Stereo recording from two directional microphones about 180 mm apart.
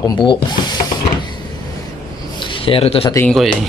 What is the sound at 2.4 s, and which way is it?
Speech, 30° left (ahead or behind).